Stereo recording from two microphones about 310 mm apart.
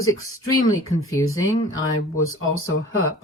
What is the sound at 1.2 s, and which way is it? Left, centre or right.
Speech, left.